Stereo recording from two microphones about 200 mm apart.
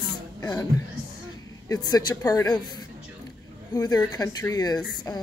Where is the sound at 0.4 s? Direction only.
15° left (ahead or behind).